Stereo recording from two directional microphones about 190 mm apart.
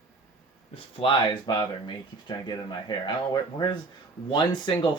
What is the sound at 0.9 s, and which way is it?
Speech, 25° left (ahead or behind).